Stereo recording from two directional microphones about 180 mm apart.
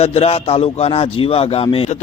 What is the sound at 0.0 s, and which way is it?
A man's voice, 35° left (ahead or behind).